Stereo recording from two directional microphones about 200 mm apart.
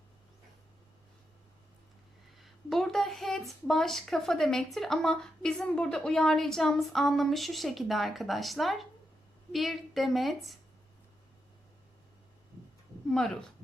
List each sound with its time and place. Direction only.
2.4 s speech: centre (ahead or behind)
13.1 s speech: centre (ahead or behind)